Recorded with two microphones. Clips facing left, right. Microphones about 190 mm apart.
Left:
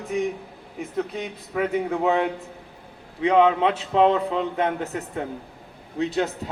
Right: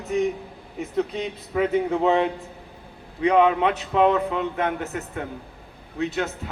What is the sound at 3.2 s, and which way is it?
A man's voice, 25° left (ahead or behind).